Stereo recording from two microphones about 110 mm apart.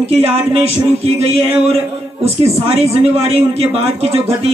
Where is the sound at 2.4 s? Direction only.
65° right (ahead or behind).